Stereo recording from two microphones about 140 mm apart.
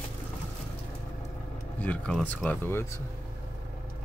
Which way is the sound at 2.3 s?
10° left (ahead or behind).